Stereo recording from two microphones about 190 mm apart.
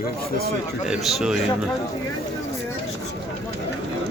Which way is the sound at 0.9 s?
5° right (ahead or behind).